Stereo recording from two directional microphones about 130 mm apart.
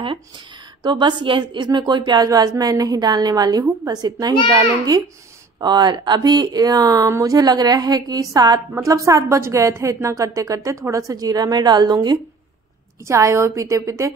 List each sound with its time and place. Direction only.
0.8 s a woman's voice: 35° right (ahead or behind)
13.0 s a woman's voice: 20° right (ahead or behind)